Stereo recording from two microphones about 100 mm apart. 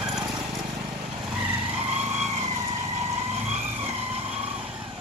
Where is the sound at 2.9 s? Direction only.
90° right.